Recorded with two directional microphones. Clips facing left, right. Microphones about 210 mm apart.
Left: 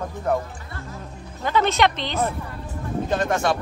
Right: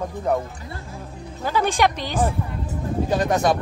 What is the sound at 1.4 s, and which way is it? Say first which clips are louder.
A woman's voice: even; 10° right (ahead or behind).